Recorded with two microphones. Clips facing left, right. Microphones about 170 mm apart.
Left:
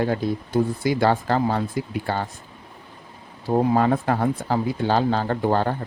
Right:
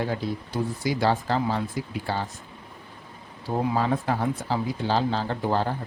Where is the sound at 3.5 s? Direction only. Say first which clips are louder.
Left 6 dB; 50° left (ahead or behind).